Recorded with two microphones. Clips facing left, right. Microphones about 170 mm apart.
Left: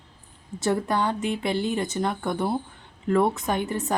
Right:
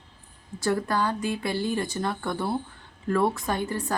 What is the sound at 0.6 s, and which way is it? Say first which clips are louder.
A woman's voice: left 1 dB; 20° left (ahead or behind).